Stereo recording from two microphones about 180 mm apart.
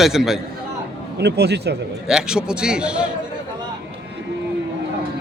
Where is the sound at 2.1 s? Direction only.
5° right (ahead or behind).